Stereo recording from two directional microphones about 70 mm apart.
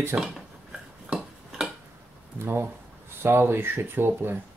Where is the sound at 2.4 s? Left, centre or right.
Right.